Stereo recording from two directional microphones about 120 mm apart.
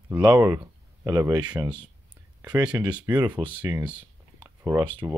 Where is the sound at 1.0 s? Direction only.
30° right (ahead or behind).